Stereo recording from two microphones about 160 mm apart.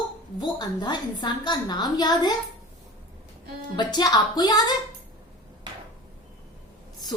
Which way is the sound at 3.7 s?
25° left (ahead or behind).